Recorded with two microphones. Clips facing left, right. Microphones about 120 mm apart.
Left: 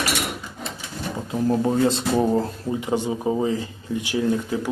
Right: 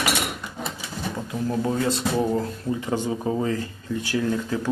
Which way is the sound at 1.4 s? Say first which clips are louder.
Left 4 dB; 30° left (ahead or behind).